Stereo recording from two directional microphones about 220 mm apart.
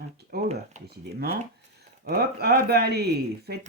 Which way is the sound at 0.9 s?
45° right (ahead or behind).